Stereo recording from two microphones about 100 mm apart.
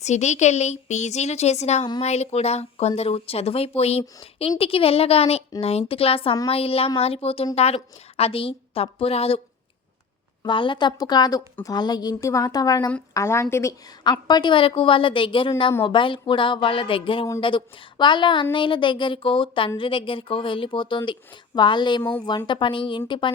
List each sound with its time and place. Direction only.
1.3 s speech: 90° left
4.4 s a woman's voice: 75° left (ahead or behind)
7.5 s a woman's voice: 90° left
10.4 s a woman's voice: 55° left (ahead or behind); by 12.9 s 40° left (ahead or behind)
13.1 s a woman's voice: 30° left (ahead or behind)
14.0 s a woman's voice: 45° left (ahead or behind)